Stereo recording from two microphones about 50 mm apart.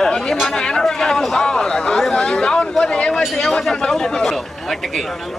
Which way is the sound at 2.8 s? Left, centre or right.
Centre.